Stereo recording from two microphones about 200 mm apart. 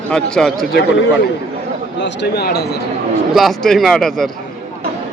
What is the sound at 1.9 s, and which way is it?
Speech, 60° left (ahead or behind).